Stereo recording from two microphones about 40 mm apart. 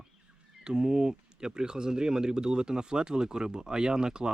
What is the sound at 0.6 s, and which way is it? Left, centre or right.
Speech, centre.